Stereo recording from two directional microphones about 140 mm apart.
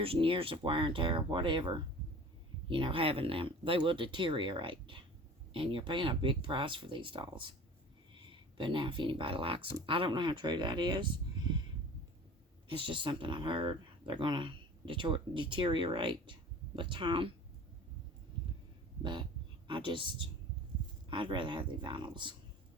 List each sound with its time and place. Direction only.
0.0 s speech: 40° right (ahead or behind)
12.6 s speech: 35° right (ahead or behind)
19.6 s speech: 35° right (ahead or behind)